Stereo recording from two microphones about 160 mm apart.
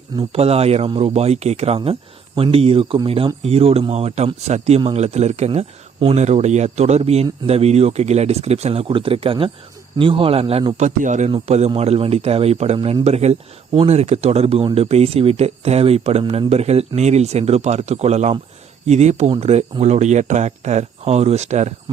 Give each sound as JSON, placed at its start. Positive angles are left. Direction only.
{"t": 0.3, "sound": "speech", "side_deg": -40}
{"t": 10.8, "sound": "speech", "side_deg": -50}